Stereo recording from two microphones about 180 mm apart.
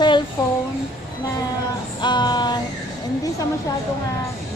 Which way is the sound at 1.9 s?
25° left (ahead or behind).